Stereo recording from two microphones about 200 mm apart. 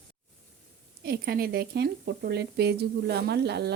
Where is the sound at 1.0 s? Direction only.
50° right (ahead or behind).